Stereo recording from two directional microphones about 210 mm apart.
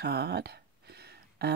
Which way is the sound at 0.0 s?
50° right (ahead or behind).